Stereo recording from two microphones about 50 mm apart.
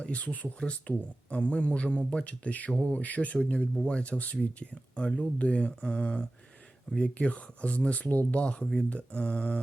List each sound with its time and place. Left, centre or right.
0.0 s speech: left